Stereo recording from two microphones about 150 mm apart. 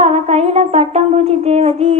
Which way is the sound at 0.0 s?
45° right (ahead or behind).